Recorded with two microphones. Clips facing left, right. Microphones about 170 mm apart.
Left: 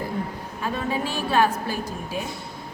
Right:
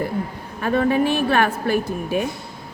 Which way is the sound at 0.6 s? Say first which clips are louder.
Right 9 dB; 60° right (ahead or behind).